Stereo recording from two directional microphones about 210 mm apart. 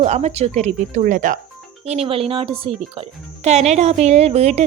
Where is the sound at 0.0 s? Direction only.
30° right (ahead or behind).